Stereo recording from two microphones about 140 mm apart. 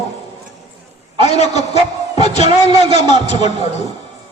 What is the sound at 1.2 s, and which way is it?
A man's voice, 50° left (ahead or behind).